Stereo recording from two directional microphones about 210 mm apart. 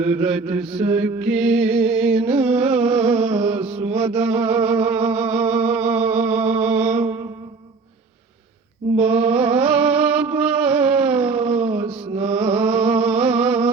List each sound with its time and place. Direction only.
0.1 s mantra: 5° right (ahead or behind)
0.7 s mantra: 30° right (ahead or behind)
0.9 s music: 5° right (ahead or behind)
3.1 s a sound: 5° right (ahead or behind)
3.3 s music: 30° right (ahead or behind)
3.7 s mantra: 30° right (ahead or behind)
3.9 s music: 5° right (ahead or behind)
9.0 s a sound: 5° right (ahead or behind)
11.8 s mantra: 30° right (ahead or behind)
12.2 s music: 5° right (ahead or behind)